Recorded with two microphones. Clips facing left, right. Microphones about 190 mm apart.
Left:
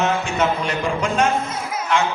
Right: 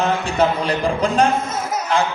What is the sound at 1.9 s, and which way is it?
Music, 35° right (ahead or behind).